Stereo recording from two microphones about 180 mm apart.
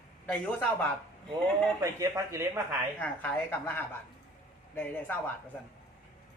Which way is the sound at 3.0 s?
10° left (ahead or behind).